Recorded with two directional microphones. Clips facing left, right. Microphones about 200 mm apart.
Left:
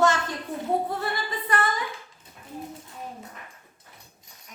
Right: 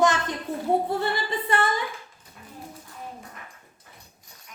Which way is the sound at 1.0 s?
25° right (ahead or behind).